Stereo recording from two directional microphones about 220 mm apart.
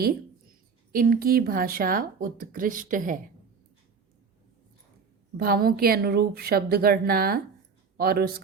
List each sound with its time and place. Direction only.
0.9 s speech: 40° right (ahead or behind)
5.4 s a woman's voice: 40° right (ahead or behind)